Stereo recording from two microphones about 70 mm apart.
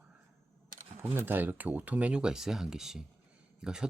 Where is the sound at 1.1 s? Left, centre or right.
Right.